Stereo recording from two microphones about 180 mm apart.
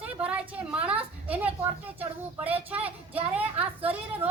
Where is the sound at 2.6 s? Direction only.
10° right (ahead or behind).